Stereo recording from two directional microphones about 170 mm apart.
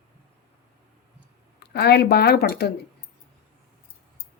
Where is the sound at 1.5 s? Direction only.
75° left (ahead or behind).